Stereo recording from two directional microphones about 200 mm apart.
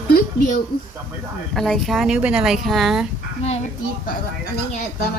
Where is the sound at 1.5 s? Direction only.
Centre (ahead or behind).